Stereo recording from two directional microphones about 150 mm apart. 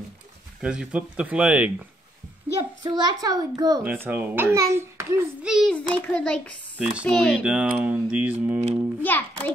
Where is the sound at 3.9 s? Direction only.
10° right (ahead or behind).